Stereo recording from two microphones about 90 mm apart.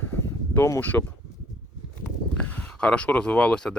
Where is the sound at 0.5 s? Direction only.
25° left (ahead or behind).